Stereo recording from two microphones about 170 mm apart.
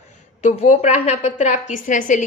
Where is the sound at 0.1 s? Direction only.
45° left (ahead or behind).